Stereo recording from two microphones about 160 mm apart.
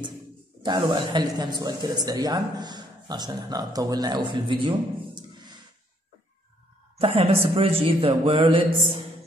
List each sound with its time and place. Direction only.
0.6 s speech: 30° right (ahead or behind)
7.0 s a man's voice: 35° right (ahead or behind)